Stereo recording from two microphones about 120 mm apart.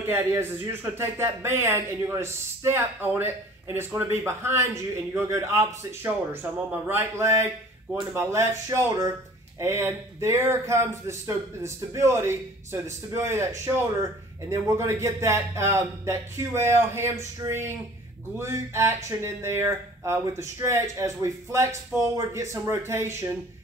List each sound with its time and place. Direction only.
0.0 s speech: 20° right (ahead or behind)